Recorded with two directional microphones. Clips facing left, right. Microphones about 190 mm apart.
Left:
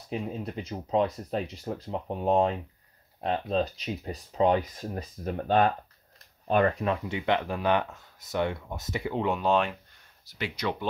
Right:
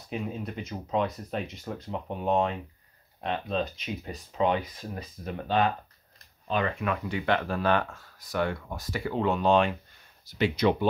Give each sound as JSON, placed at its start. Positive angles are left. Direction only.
{"t": 0.4, "sound": "speech", "side_deg": 35}
{"t": 6.8, "sound": "speech", "side_deg": 25}
{"t": 10.2, "sound": "speech", "side_deg": -25}